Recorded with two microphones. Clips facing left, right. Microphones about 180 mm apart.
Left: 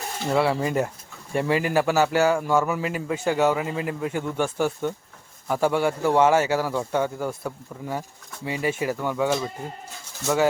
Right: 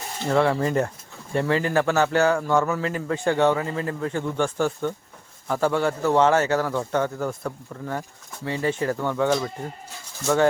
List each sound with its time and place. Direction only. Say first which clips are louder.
0.3 s a man's voice: right 2 dB; 10° left (ahead or behind)